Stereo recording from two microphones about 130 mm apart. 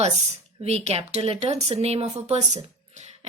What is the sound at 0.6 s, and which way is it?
Speech, 55° right (ahead or behind).